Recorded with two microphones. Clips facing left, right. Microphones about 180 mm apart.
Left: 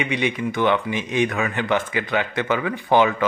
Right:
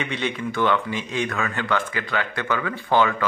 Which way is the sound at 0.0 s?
15° left (ahead or behind).